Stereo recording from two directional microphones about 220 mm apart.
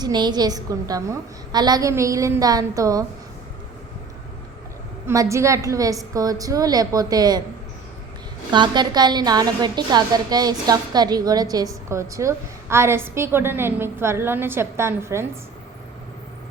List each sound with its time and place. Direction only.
0.0 s a woman's voice: 20° right (ahead or behind)
5.0 s a woman's voice: 15° right (ahead or behind)
8.5 s a woman's voice: 20° right (ahead or behind)